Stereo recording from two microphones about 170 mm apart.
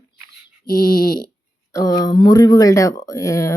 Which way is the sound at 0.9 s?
25° left (ahead or behind).